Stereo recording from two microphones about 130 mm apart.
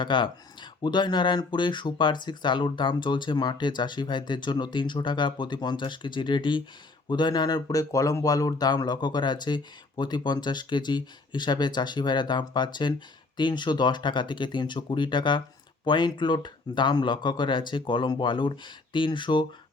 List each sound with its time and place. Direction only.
0.0 s speech: 40° left (ahead or behind)